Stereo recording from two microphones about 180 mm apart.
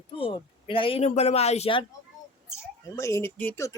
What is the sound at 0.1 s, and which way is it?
Speech, 30° left (ahead or behind).